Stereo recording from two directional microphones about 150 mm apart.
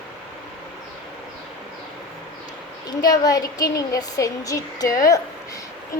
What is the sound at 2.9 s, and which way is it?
A woman's voice, 25° left (ahead or behind).